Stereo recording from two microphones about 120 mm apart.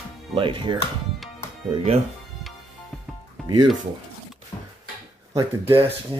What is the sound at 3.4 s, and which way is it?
Speech, 40° right (ahead or behind).